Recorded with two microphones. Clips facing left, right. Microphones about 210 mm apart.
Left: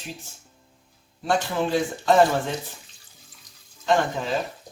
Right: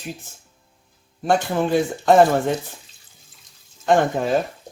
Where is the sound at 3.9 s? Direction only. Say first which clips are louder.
Right 5 dB; 50° right (ahead or behind).